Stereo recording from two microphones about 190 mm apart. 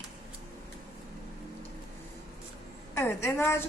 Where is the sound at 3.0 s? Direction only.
10° left (ahead or behind).